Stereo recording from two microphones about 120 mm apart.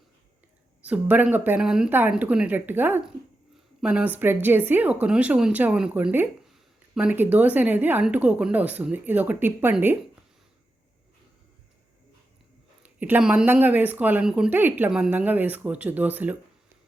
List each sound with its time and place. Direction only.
0.9 s speech: 10° right (ahead or behind)
12.8 s speech: 15° right (ahead or behind)